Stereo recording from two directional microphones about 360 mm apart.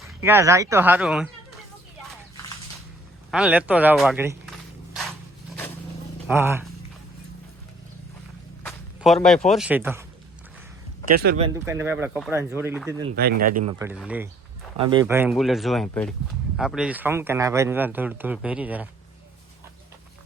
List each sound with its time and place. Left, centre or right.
0.2 s speech: centre
3.3 s speech: centre
6.2 s speech: centre
8.6 s speech: centre
11.2 s speech: right
11.4 s speech: centre
13.1 s speech: right
13.7 s speech: centre